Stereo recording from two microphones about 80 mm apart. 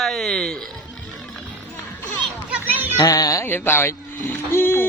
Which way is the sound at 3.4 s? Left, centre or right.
Left.